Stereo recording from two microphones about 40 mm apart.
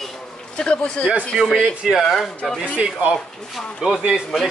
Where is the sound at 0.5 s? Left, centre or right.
Left.